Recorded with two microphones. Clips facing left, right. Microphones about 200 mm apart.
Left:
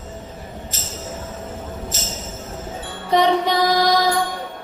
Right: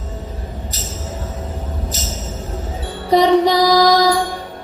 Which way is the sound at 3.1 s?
40° right (ahead or behind).